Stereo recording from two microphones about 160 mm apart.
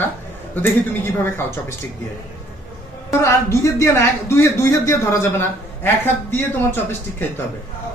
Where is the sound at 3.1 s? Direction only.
20° left (ahead or behind).